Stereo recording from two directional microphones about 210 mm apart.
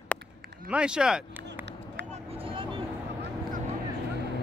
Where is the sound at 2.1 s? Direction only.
25° right (ahead or behind).